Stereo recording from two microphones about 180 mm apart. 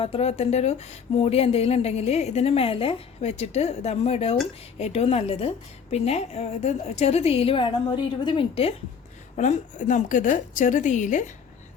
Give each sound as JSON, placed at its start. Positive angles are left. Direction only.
{"t": 0.0, "sound": "speech", "side_deg": 35}
{"t": 9.3, "sound": "a woman's voice", "side_deg": 40}